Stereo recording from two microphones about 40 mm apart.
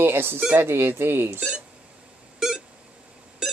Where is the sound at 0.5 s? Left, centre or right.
Right.